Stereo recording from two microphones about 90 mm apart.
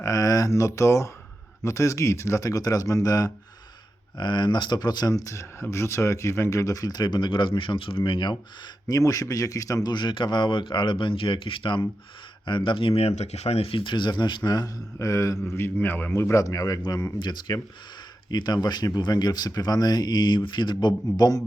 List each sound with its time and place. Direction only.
0.0 s a man's voice: 40° left (ahead or behind)
4.2 s speech: 60° left (ahead or behind)
8.9 s a man's voice: 40° left (ahead or behind)
9.9 s speech: 60° left (ahead or behind)
14.9 s a man's voice: 35° left (ahead or behind)